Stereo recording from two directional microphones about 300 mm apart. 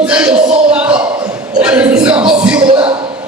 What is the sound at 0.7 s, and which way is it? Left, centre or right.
Speech, centre.